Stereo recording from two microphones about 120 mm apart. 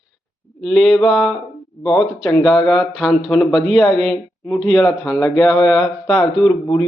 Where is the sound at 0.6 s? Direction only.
Centre (ahead or behind).